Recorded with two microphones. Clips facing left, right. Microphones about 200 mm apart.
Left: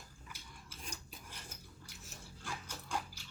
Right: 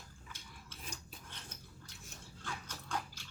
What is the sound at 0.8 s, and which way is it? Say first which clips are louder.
Filing: even; centre (ahead or behind).